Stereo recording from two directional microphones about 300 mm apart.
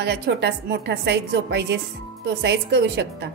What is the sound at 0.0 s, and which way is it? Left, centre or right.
A woman's voice, right.